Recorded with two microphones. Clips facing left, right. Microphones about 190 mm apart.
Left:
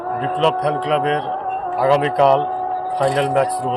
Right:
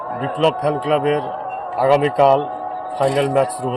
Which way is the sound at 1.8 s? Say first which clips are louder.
Right 1 dB; 5° right (ahead or behind).